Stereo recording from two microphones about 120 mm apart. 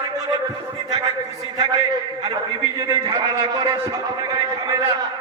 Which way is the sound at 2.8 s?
30° right (ahead or behind).